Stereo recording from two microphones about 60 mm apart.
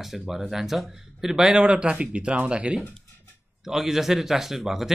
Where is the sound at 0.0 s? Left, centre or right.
Centre.